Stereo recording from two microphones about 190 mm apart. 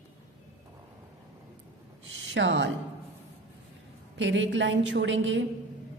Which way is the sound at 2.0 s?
70° right (ahead or behind).